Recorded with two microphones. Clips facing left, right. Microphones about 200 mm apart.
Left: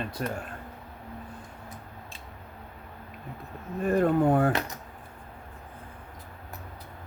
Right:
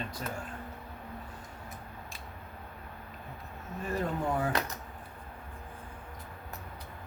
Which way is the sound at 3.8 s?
60° left (ahead or behind).